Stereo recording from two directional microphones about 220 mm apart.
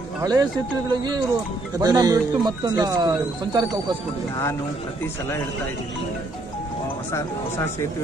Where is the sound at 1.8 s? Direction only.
15° right (ahead or behind).